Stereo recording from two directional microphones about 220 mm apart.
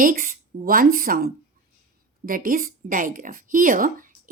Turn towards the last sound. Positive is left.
turn(degrees=-40)  # may be behind; listen again after turning